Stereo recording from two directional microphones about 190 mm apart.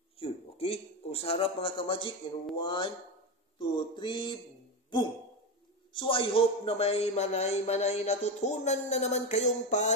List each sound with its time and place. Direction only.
0.2 s a sound: 30° left (ahead or behind)
1.2 s speech: 30° left (ahead or behind)
5.9 s a man's voice: 25° left (ahead or behind)